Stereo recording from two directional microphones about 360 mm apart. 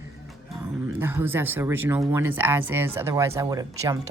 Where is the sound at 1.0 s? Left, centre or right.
Centre.